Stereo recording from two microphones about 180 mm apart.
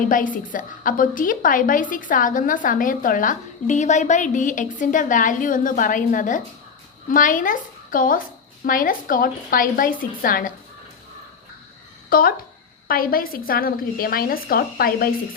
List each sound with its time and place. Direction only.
0.1 s a woman's voice: 50° left (ahead or behind)
12.0 s a woman's voice: 55° left (ahead or behind)